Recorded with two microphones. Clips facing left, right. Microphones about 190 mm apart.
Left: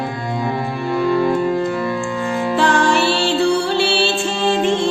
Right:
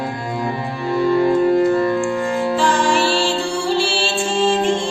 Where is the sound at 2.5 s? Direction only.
65° left (ahead or behind).